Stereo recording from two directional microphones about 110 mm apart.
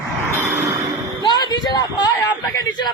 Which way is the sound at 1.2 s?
45° left (ahead or behind).